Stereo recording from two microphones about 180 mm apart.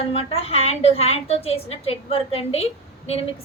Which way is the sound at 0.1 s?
30° left (ahead or behind).